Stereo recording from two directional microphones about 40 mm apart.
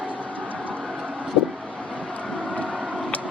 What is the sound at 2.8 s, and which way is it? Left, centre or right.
Vehicle, centre.